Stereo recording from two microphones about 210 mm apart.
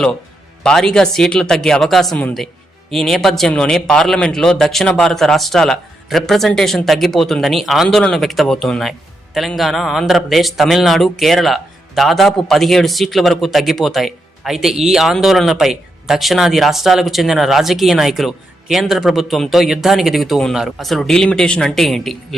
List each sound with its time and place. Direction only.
0.6 s a man's voice: 5° left (ahead or behind)